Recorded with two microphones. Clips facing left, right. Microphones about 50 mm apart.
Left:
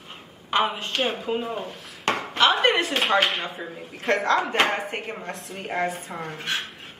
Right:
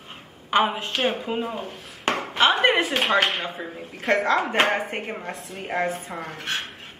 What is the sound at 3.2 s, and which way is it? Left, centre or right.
Speech, right.